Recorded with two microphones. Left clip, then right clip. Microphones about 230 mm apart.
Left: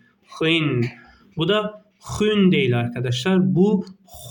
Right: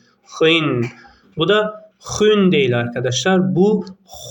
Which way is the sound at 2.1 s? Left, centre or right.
Left.